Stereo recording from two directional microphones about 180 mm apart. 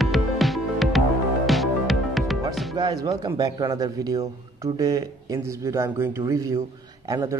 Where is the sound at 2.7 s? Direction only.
20° right (ahead or behind).